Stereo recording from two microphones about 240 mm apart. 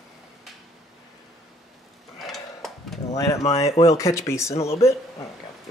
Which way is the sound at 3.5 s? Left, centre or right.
Left.